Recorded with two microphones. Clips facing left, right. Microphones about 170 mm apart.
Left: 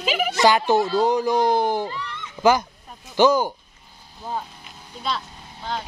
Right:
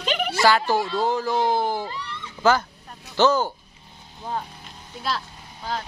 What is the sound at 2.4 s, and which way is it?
Speech, 15° left (ahead or behind).